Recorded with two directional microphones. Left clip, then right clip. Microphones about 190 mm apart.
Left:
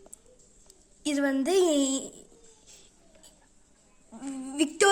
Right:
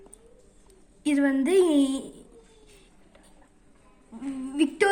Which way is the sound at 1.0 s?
35° left (ahead or behind).